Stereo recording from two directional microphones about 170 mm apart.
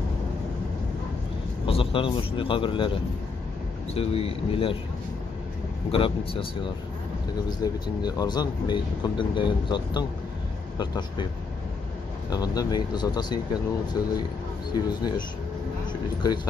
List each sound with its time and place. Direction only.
1.7 s a man's voice: 35° left (ahead or behind)
5.9 s a man's voice: 30° left (ahead or behind)
7.4 s speech: 25° left (ahead or behind)
12.3 s speech: 20° left (ahead or behind)
14.7 s speech: 25° left (ahead or behind)